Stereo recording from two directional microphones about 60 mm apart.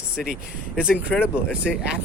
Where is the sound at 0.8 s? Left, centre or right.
Centre.